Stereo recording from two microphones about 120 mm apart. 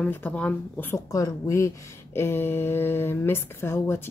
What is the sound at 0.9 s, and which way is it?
Speech, 25° left (ahead or behind).